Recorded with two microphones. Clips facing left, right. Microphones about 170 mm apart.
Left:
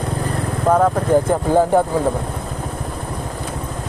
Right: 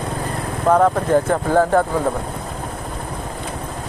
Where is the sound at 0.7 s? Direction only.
5° left (ahead or behind).